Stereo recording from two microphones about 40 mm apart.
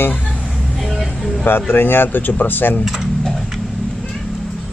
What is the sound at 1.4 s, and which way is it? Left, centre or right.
Speech, left.